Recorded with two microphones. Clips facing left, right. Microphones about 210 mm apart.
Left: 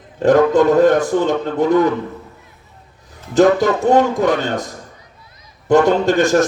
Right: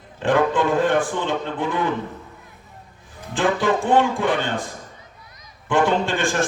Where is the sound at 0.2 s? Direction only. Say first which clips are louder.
Left 7 dB; 40° left (ahead or behind).